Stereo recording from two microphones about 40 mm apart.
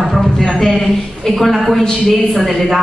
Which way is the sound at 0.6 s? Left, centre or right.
Centre.